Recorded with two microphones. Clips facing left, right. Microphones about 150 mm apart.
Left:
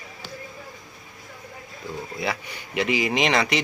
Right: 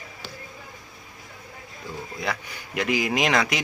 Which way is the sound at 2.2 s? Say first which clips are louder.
Left 1 dB; centre (ahead or behind).